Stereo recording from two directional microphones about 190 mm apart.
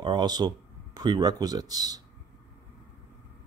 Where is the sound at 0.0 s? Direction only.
25° right (ahead or behind).